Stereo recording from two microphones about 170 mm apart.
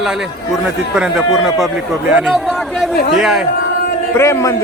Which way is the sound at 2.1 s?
5° right (ahead or behind).